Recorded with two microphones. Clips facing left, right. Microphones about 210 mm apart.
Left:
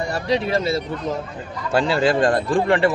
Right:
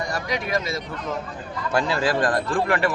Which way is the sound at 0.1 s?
30° left (ahead or behind).